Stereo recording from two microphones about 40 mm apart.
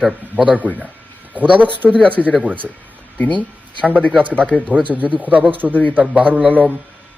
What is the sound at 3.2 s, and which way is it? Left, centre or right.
Speech, left.